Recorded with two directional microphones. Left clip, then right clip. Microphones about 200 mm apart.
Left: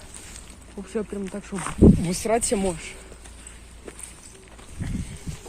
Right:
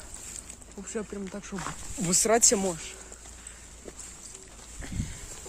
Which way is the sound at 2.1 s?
25° right (ahead or behind).